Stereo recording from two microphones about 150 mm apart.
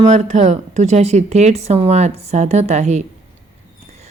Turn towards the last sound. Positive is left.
turn(degrees=-50)  # may be behind; listen again after turning